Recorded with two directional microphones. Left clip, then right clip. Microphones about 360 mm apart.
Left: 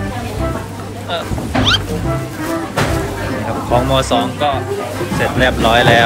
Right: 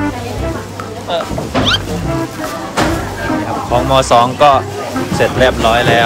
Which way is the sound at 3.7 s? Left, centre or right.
Centre.